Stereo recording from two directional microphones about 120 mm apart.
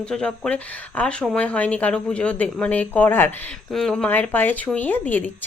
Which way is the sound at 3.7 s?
5° left (ahead or behind).